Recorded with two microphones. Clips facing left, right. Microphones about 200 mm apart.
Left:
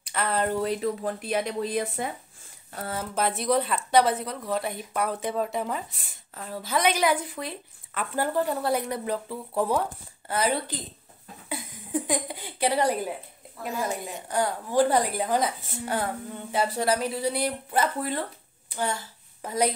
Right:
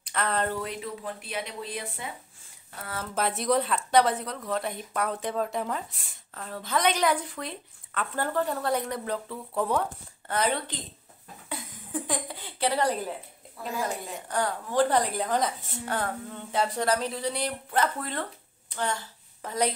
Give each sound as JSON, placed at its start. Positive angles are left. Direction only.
{"t": 0.0, "sound": "speech", "side_deg": 5}
{"t": 0.6, "sound": "speech", "side_deg": 40}
{"t": 3.2, "sound": "a woman's voice", "side_deg": 0}